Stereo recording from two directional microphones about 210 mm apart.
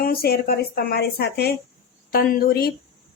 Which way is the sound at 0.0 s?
45° left (ahead or behind).